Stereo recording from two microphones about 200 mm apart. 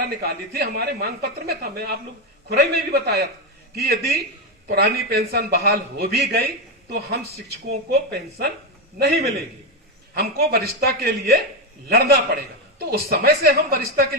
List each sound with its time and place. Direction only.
0.2 s a woman's voice: 50° right (ahead or behind)